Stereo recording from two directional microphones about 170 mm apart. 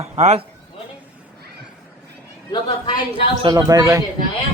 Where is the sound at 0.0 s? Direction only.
40° right (ahead or behind).